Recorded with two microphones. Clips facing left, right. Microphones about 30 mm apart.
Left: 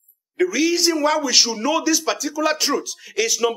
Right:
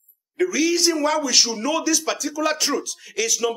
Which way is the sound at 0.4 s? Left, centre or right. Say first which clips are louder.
Left 1 dB; centre.